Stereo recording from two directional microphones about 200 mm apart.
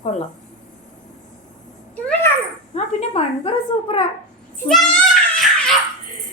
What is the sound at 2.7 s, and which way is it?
Speech, 30° left (ahead or behind).